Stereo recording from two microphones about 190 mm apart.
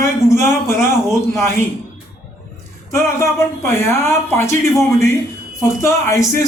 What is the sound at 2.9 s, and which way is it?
Speech, 15° left (ahead or behind).